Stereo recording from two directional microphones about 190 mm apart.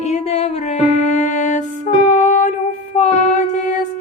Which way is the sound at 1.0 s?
40° left (ahead or behind).